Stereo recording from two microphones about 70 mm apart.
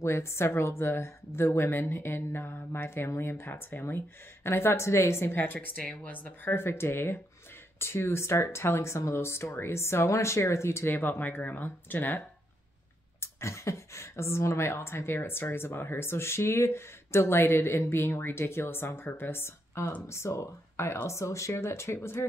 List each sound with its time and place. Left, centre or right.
0.0 s speech: left
13.2 s speech: left